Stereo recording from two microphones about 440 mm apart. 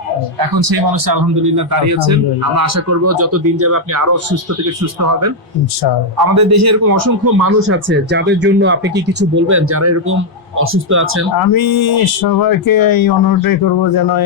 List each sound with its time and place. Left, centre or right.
0.3 s a man's voice: right
6.3 s speech: right
11.3 s speech: left